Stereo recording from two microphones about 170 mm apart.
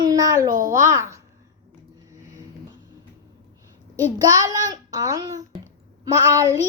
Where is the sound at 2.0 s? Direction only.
20° right (ahead or behind).